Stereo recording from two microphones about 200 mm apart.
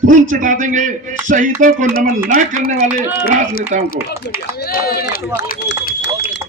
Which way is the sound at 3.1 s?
45° left (ahead or behind).